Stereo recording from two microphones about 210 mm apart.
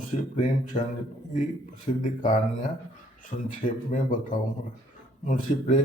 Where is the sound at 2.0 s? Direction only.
40° left (ahead or behind).